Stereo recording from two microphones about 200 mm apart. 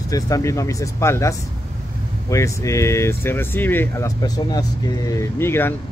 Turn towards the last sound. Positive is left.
turn(degrees=10)  # may be behind; listen again after turning